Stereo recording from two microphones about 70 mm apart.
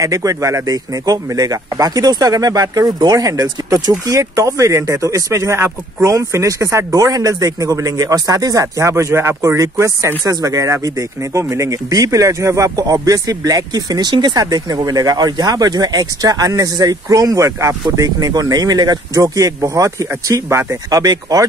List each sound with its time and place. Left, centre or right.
0.0 s speech: right
10.2 s speech: right
14.4 s speech: right
17.9 s speech: right